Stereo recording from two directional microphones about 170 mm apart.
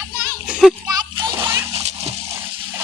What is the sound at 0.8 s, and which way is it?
Splash, 20° right (ahead or behind).